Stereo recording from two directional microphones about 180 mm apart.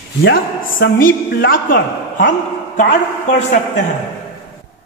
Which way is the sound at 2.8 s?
50° left (ahead or behind).